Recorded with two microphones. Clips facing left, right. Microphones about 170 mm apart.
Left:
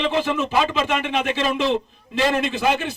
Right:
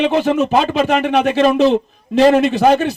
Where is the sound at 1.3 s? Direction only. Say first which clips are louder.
Right 9 dB; 45° right (ahead or behind).